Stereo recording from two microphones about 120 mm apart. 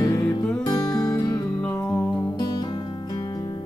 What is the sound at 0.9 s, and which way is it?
Music, 30° left (ahead or behind).